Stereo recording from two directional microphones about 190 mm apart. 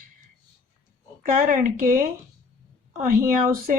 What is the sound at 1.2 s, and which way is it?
A woman's voice, 45° right (ahead or behind).